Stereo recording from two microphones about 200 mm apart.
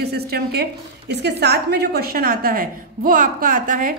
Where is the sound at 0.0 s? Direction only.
55° right (ahead or behind).